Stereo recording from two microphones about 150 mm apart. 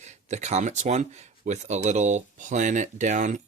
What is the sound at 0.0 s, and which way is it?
Speech, 50° right (ahead or behind).